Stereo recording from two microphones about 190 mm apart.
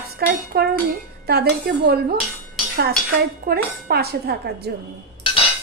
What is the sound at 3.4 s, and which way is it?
A woman's voice, 55° right (ahead or behind).